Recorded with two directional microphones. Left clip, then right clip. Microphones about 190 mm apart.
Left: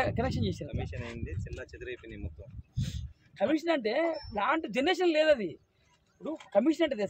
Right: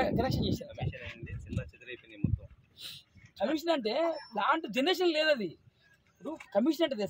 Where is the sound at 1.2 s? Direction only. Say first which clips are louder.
Left 2 dB; 55° right (ahead or behind).